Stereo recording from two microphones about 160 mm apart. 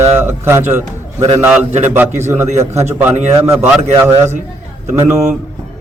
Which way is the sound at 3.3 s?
15° right (ahead or behind).